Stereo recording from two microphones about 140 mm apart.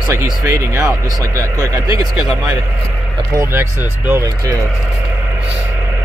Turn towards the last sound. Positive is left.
turn(degrees=-15)  # may be behind; listen again after turning